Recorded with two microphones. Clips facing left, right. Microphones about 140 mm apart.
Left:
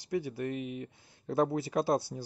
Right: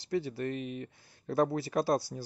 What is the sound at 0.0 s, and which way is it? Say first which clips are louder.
Speech: right 1 dB; 15° left (ahead or behind).